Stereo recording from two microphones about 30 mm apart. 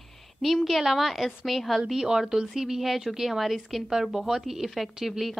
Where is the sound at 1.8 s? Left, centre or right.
Centre.